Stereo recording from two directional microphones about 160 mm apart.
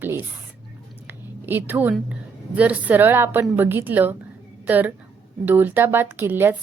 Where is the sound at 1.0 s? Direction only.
10° right (ahead or behind).